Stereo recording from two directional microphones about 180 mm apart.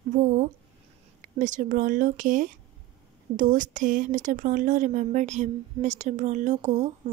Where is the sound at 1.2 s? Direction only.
45° right (ahead or behind).